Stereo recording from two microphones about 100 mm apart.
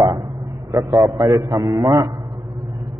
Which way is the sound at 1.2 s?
35° right (ahead or behind).